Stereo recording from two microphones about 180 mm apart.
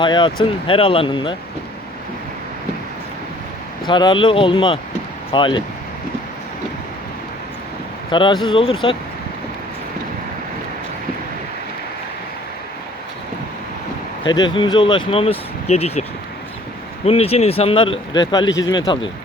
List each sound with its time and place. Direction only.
0.0 s speech: 25° left (ahead or behind)
3.8 s speech: 25° left (ahead or behind)
8.1 s speech: 25° left (ahead or behind)
14.3 s speech: 25° left (ahead or behind)
17.1 s speech: 35° left (ahead or behind)